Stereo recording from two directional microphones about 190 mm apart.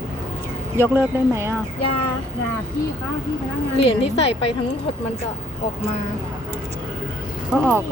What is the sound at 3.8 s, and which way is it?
Speech, 30° left (ahead or behind).